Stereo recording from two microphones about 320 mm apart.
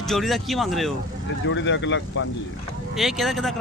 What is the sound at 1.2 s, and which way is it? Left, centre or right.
Speech, left.